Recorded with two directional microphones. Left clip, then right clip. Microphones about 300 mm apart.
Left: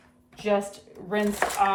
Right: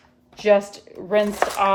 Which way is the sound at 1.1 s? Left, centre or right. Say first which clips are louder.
Right 6 dB; right.